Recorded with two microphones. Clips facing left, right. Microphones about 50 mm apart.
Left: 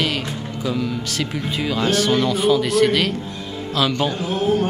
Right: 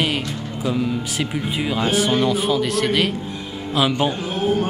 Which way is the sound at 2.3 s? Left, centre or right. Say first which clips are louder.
Left 2 dB; centre.